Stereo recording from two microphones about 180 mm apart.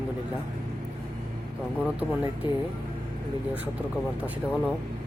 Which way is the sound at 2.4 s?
25° left (ahead or behind).